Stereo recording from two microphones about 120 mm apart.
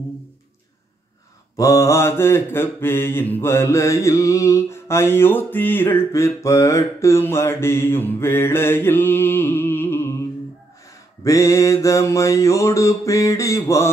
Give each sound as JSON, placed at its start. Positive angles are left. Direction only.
{"t": 1.6, "sound": "mantra", "side_deg": 25}
{"t": 11.2, "sound": "mantra", "side_deg": 25}